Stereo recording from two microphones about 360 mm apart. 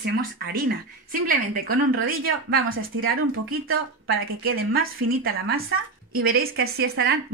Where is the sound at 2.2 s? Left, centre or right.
Right.